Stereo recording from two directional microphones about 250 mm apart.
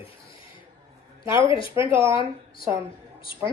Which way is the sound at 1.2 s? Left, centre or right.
Centre.